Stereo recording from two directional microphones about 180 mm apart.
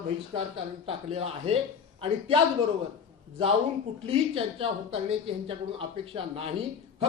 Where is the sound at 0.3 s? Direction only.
30° right (ahead or behind).